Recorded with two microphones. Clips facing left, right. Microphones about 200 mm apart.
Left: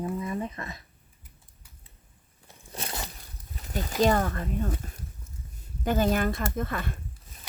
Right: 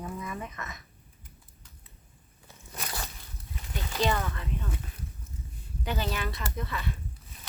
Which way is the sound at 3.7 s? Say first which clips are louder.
Left 6 dB; 45° left (ahead or behind).